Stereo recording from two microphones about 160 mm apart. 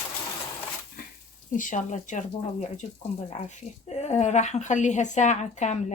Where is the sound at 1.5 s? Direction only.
55° left (ahead or behind).